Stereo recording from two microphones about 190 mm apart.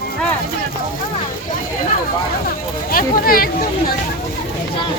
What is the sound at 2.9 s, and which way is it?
Speech, 50° left (ahead or behind).